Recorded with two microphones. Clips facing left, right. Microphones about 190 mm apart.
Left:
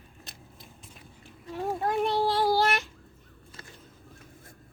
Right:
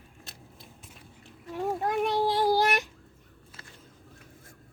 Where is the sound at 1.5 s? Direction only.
15° right (ahead or behind).